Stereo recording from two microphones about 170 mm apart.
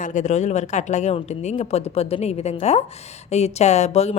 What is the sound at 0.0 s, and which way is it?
A woman's voice, 45° left (ahead or behind).